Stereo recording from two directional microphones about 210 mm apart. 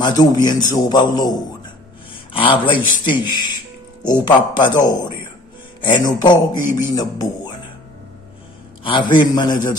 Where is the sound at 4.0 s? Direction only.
20° left (ahead or behind).